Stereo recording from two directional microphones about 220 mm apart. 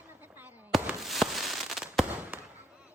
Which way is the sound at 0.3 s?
5° right (ahead or behind).